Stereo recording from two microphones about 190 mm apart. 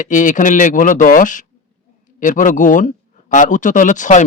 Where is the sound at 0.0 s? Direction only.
40° left (ahead or behind).